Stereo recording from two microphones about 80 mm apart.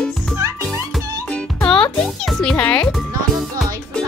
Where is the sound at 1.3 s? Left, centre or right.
Centre.